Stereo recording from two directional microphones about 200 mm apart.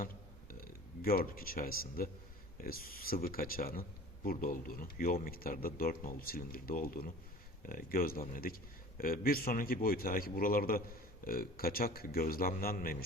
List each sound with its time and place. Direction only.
0.5 s speech: 45° left (ahead or behind)